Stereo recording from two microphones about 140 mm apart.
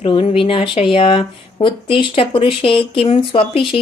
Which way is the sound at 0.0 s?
40° left (ahead or behind).